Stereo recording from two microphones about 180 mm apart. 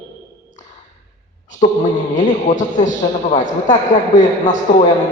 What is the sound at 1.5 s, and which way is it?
A man's voice, 40° left (ahead or behind).